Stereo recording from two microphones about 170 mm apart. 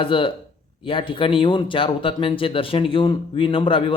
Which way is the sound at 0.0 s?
30° left (ahead or behind).